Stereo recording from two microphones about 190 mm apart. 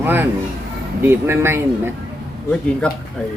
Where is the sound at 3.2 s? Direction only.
5° left (ahead or behind).